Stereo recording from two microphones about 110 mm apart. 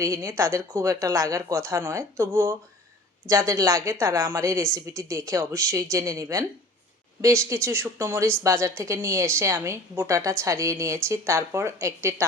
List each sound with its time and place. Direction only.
0.0 s a woman's voice: 25° right (ahead or behind)